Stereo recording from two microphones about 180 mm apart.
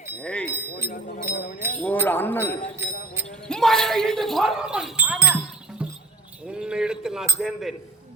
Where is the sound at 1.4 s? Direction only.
60° left (ahead or behind).